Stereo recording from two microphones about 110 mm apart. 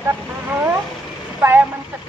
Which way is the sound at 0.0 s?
20° right (ahead or behind).